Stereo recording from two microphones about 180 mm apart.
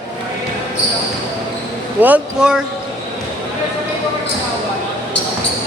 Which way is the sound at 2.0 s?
10° right (ahead or behind).